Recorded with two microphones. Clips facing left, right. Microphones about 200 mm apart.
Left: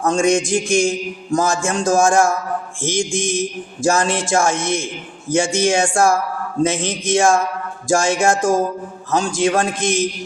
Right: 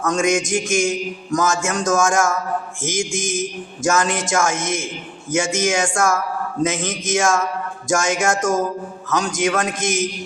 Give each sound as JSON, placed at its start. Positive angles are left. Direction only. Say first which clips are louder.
{"t": 0.0, "sound": "mantra", "louder": "left 3 dB", "side_deg": 30}